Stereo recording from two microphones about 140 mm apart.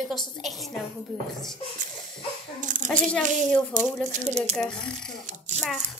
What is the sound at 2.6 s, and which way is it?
Speech, 60° right (ahead or behind).